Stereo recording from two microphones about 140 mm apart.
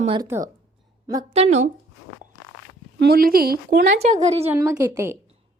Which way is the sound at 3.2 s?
90° right.